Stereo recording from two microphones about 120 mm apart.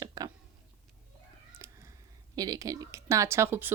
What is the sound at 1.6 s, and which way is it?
Cat, 25° right (ahead or behind).